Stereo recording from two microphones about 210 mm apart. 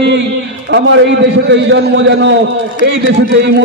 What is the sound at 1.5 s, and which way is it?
Speech, 55° right (ahead or behind).